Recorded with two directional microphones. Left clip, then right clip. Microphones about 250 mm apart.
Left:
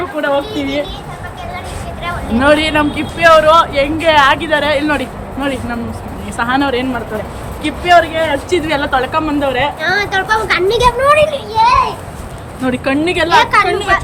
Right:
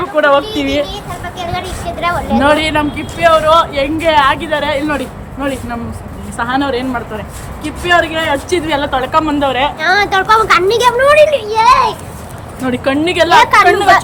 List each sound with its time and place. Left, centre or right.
0.2 s speech: centre
2.0 s speech: right
2.4 s speech: centre
12.6 s speech: centre